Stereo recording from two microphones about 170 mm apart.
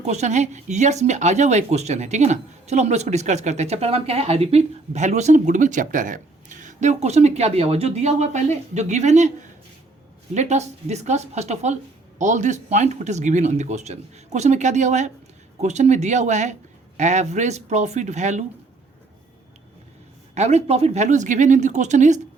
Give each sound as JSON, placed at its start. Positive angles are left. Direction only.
{"t": 0.0, "sound": "speech", "side_deg": -40}
{"t": 20.3, "sound": "speech", "side_deg": -40}